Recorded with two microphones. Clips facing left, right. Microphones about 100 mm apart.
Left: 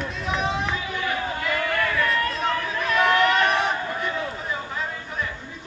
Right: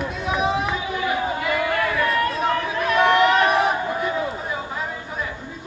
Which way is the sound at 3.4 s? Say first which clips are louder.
Right 4 dB; 5° right (ahead or behind).